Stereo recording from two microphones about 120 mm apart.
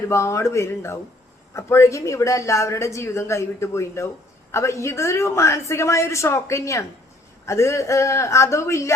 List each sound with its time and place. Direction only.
0.1 s speech: 25° left (ahead or behind)